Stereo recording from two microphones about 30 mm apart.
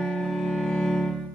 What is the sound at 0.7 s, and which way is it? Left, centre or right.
Music, left.